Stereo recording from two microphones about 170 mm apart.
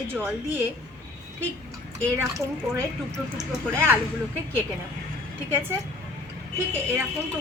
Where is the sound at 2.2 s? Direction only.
15° right (ahead or behind).